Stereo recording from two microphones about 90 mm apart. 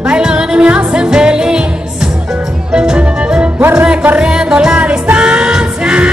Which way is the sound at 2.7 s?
10° right (ahead or behind).